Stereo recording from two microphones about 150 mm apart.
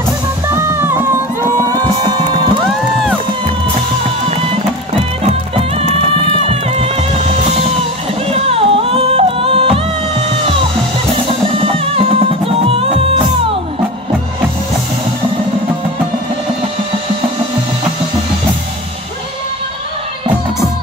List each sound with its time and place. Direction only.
0.6 s music: 15° right (ahead or behind)
6.5 s music: 45° right (ahead or behind)
8.3 s music: 40° right (ahead or behind)
11.9 s music: 40° right (ahead or behind)